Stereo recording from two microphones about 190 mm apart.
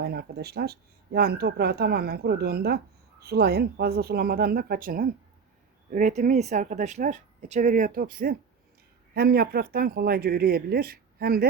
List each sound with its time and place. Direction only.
0.0 s speech: 55° right (ahead or behind)